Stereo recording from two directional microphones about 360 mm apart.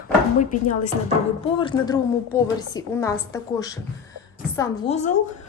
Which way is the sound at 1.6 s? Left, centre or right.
Centre.